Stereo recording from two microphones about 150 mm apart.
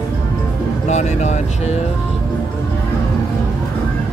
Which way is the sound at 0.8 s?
50° left (ahead or behind).